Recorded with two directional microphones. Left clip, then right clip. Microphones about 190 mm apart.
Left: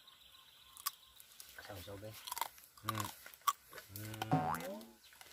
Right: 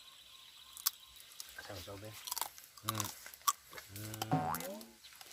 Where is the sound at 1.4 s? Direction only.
5° left (ahead or behind).